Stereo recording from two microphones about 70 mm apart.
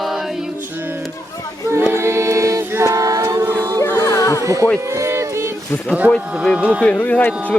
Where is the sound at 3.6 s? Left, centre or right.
Right.